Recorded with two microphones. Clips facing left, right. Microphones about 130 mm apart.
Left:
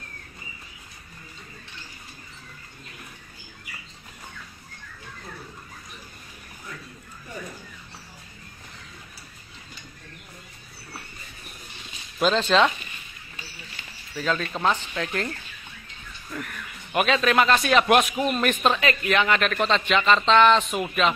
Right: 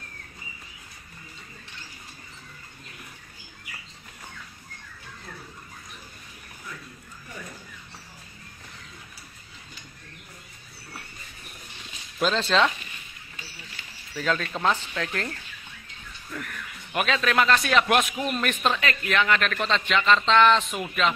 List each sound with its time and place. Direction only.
12.2 s speech: 15° left (ahead or behind)
14.1 s speech: 5° left (ahead or behind)
16.3 s speech: 15° left (ahead or behind)